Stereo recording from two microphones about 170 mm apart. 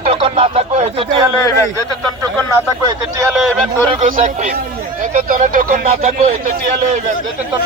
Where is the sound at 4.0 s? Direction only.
50° right (ahead or behind).